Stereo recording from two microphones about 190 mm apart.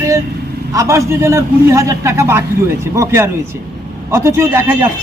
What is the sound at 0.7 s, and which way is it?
A man's voice, 15° right (ahead or behind).